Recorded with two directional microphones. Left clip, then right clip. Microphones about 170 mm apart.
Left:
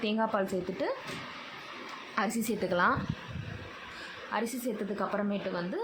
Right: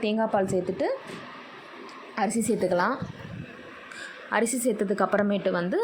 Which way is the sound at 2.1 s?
15° right (ahead or behind).